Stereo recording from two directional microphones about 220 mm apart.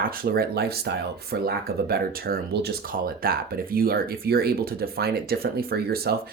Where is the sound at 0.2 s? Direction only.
45° right (ahead or behind).